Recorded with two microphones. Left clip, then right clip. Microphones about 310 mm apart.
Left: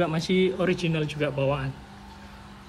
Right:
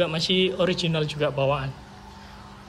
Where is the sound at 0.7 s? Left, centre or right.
Right.